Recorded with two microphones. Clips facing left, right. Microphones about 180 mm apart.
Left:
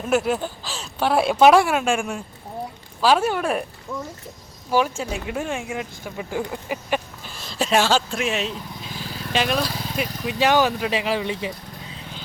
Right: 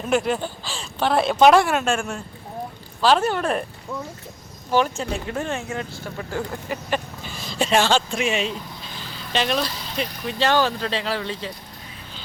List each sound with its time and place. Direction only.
0.0 s speech: 5° left (ahead or behind)
4.7 s speech: 5° left (ahead or behind)